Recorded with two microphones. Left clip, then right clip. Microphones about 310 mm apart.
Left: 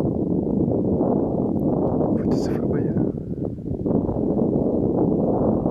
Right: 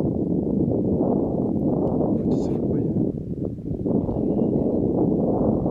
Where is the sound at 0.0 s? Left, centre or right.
Right.